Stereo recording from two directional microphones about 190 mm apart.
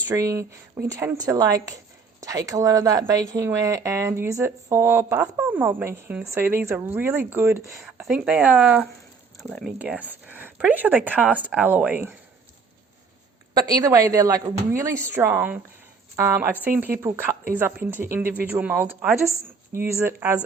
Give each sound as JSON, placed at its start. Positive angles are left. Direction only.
{"t": 0.1, "sound": "speech", "side_deg": -15}
{"t": 13.5, "sound": "speech", "side_deg": -20}